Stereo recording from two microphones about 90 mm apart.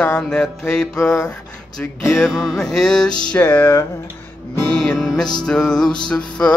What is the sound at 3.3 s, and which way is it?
Music, 20° left (ahead or behind).